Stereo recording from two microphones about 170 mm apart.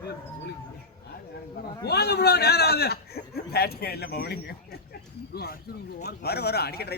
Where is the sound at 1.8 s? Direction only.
70° left (ahead or behind).